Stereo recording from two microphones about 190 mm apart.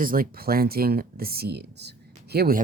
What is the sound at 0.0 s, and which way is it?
Speech, 50° right (ahead or behind).